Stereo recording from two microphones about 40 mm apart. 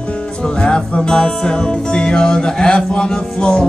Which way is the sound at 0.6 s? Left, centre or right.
Left.